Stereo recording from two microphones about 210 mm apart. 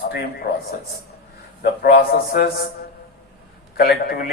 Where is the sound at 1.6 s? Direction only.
45° left (ahead or behind).